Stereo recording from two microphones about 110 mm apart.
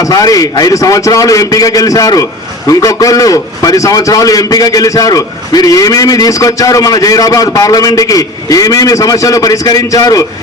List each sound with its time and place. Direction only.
0.0 s a man's voice: 35° left (ahead or behind)